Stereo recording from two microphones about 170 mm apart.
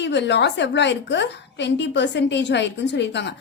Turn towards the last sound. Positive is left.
turn(degrees=90)